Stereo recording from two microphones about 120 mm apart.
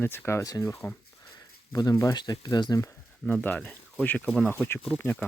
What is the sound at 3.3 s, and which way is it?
Speech, 15° left (ahead or behind).